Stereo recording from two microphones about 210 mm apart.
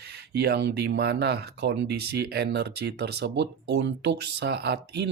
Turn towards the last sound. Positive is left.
turn(degrees=-55)  # may be behind; listen again after turning